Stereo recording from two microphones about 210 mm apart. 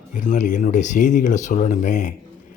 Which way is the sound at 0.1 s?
35° left (ahead or behind).